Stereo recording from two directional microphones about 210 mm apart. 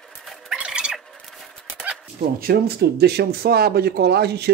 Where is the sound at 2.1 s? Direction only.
45° right (ahead or behind).